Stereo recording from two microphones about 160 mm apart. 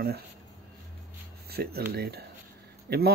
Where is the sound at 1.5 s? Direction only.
75° right (ahead or behind).